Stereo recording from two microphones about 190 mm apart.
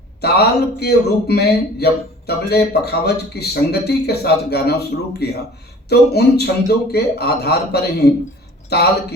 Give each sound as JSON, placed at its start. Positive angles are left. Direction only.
{"t": 0.2, "sound": "speech", "side_deg": 60}